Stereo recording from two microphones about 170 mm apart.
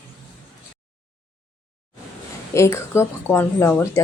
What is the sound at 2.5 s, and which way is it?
Speech, 15° left (ahead or behind).